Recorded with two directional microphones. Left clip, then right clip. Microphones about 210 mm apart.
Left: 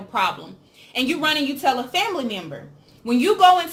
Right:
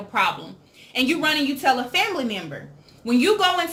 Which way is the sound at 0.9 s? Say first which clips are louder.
Even; 5° left (ahead or behind).